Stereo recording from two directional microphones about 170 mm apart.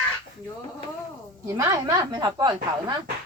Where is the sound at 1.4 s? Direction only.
20° right (ahead or behind).